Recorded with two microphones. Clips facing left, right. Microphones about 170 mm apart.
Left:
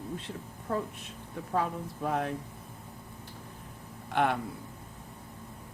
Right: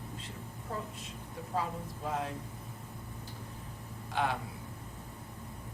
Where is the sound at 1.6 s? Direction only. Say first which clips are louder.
Left 5 dB; 60° left (ahead or behind).